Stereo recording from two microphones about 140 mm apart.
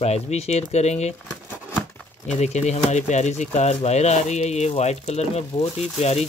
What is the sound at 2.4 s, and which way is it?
Speech, 55° left (ahead or behind).